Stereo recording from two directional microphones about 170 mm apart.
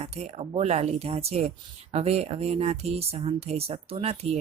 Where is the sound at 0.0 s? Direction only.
35° right (ahead or behind).